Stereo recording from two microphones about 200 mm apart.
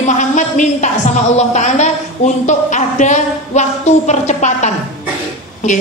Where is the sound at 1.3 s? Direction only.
35° left (ahead or behind).